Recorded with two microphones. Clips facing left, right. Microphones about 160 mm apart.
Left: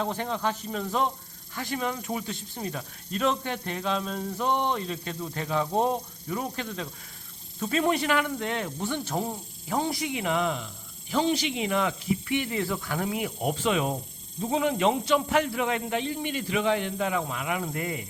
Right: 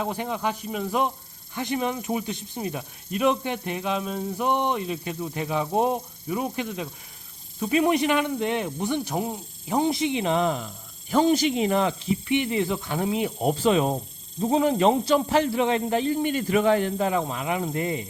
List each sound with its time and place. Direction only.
0.0 s a man's voice: 15° right (ahead or behind)